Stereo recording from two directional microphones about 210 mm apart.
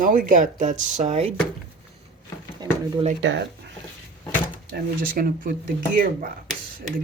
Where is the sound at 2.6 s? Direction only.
20° right (ahead or behind).